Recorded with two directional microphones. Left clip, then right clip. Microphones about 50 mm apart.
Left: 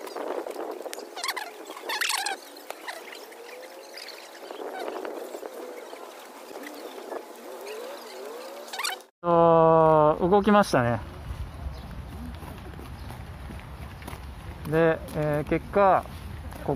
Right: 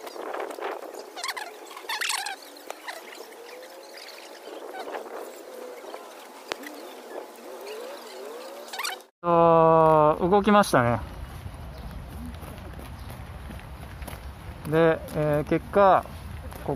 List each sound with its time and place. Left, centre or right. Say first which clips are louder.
1.1 s turkey: left 1 dB; centre
7.6 s a sound: even; centre
8.7 s zipper: left 1 dB; centre
9.2 s a sound: even; centre
14.7 s speech: right 1 dB; right
15.2 s speech: right 2 dB; right
15.7 s speech: right 2 dB; right
16.7 s speech: left 1 dB; left